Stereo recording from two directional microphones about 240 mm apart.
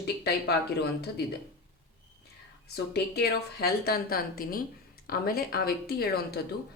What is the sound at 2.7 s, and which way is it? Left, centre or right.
A woman's voice, left.